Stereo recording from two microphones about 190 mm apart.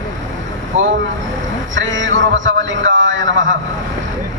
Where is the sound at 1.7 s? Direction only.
80° right.